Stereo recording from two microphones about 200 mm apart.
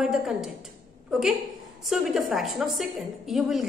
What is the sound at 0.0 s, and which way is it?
Speech, centre (ahead or behind).